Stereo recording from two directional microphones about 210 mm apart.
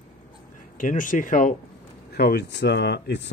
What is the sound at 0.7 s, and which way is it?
Speech, 40° left (ahead or behind).